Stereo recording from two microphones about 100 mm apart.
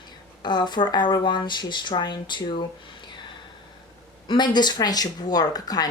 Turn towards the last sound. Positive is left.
turn(degrees=40)  # may be behind; listen again after turning